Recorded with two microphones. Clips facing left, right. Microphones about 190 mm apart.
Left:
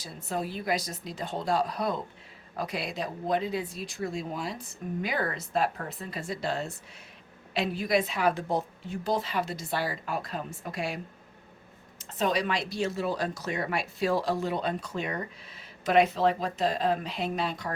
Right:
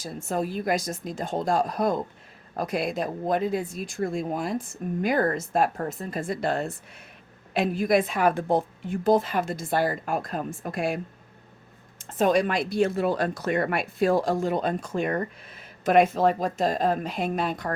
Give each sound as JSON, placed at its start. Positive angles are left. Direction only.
{"t": 0.0, "sound": "speech", "side_deg": -45}